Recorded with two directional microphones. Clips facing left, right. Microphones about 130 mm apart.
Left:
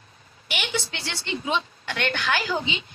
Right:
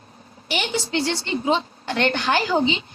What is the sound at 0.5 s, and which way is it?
A woman's voice, 30° right (ahead or behind).